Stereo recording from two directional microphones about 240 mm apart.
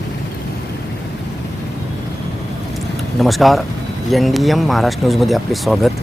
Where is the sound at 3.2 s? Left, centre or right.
Centre.